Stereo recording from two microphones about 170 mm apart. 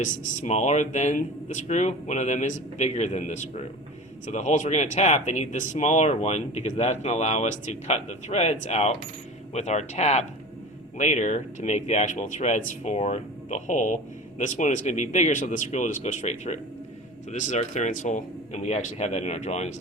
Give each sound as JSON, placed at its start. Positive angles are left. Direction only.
{"t": 0.0, "sound": "speech", "side_deg": 40}